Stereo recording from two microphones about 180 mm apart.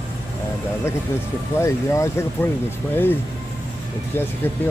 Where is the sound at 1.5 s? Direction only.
15° left (ahead or behind).